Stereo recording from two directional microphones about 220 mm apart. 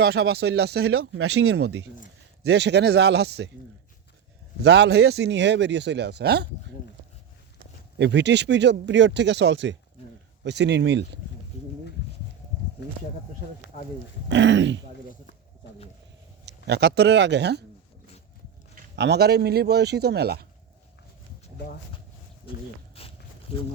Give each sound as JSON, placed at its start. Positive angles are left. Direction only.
{"t": 0.0, "sound": "speech", "side_deg": -45}
{"t": 0.9, "sound": "speech", "side_deg": -75}
{"t": 2.4, "sound": "speech", "side_deg": -50}
{"t": 4.6, "sound": "speech", "side_deg": -50}
{"t": 7.9, "sound": "speech", "side_deg": -50}
{"t": 14.3, "sound": "speech", "side_deg": -55}
{"t": 16.5, "sound": "speech", "side_deg": -50}
{"t": 18.9, "sound": "speech", "side_deg": -50}
{"t": 23.0, "sound": "a sound", "side_deg": 25}